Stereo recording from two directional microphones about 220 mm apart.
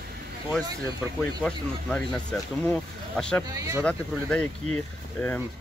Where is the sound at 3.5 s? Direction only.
15° right (ahead or behind).